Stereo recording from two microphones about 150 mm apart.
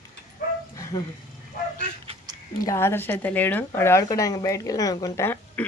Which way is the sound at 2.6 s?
15° left (ahead or behind).